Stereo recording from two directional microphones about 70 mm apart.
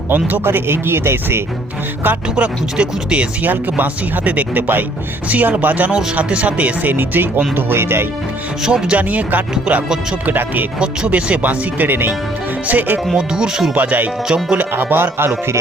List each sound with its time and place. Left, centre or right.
0.1 s speech: right
2.3 s speech: centre; by 8.0 s right
8.6 s speech: centre
13.1 s speech: centre
13.7 s speech: right
14.3 s speech: centre
14.6 s speech: right